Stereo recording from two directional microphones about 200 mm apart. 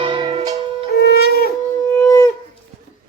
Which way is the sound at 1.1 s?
50° left (ahead or behind).